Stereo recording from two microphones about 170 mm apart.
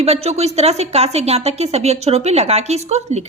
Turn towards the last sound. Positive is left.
turn(degrees=-40)  # may be behind; listen again after turning